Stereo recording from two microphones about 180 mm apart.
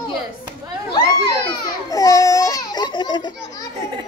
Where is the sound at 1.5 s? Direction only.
20° left (ahead or behind).